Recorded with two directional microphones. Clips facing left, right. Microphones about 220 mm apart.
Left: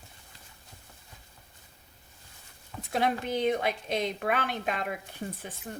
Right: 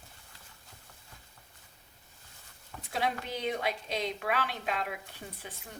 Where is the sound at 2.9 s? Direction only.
50° left (ahead or behind).